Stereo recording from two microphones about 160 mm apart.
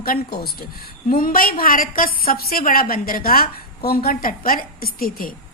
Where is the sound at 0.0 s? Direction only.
70° left (ahead or behind).